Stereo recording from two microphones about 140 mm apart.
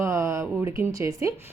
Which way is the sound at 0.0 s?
20° right (ahead or behind).